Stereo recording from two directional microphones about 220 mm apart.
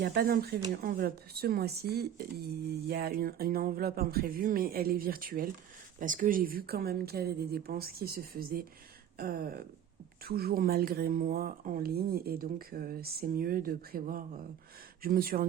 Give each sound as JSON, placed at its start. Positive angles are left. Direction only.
{"t": 0.0, "sound": "speech", "side_deg": -45}